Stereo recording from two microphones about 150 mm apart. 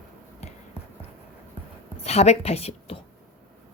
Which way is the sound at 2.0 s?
45° left (ahead or behind).